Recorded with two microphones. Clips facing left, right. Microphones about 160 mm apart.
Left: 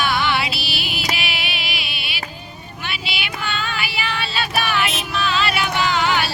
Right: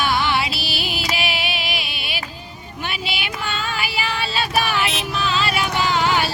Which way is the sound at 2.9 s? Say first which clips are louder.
Right 1 dB; 40° right (ahead or behind).